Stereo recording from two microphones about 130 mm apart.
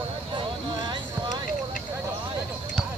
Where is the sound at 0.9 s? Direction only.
35° right (ahead or behind).